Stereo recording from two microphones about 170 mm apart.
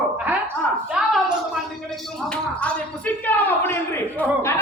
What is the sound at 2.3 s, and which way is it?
Speech, 10° left (ahead or behind).